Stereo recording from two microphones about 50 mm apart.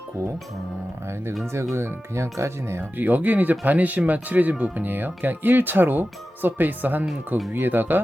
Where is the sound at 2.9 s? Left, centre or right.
Right.